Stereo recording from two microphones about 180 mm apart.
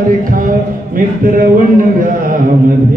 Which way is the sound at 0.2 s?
50° right (ahead or behind).